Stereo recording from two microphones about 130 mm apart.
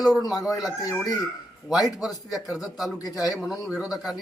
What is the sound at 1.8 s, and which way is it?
Speech, 5° right (ahead or behind).